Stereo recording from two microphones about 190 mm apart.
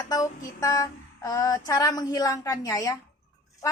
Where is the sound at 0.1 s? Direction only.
20° left (ahead or behind).